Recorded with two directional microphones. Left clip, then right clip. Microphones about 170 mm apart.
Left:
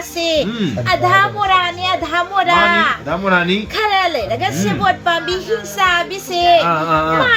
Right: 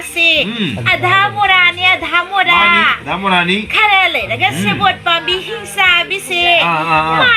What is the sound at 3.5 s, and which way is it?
A woman's voice, 35° left (ahead or behind).